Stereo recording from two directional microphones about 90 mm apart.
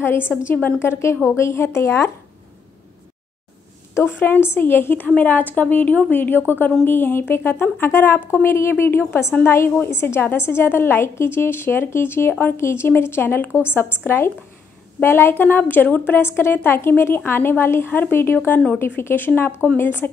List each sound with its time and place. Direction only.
0.0 s a woman's voice: 25° left (ahead or behind)
3.9 s a woman's voice: 25° left (ahead or behind)